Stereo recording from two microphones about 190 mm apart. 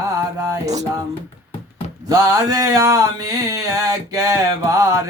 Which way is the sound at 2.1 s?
15° right (ahead or behind).